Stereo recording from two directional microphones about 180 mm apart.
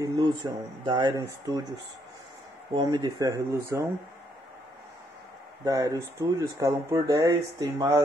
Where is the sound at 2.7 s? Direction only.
20° right (ahead or behind).